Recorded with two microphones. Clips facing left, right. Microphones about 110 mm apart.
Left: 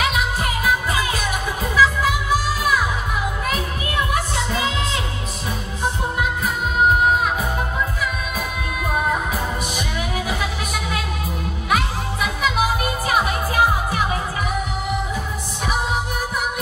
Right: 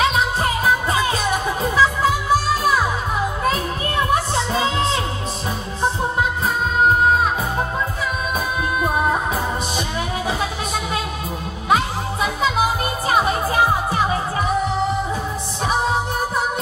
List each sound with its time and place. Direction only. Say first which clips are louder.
0.0 s music: right 3 dB; 30° right (ahead or behind)
4.1 s music: right 3 dB; 30° right (ahead or behind)
8.4 s music: right 5 dB; 30° right (ahead or behind)